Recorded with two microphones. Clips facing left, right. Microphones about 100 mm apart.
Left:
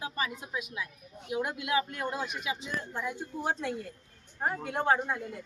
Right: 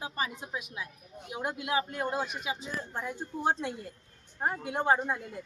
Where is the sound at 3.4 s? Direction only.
25° right (ahead or behind).